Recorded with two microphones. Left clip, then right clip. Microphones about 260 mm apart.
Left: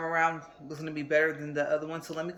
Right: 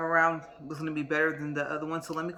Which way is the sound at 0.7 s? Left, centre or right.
Centre.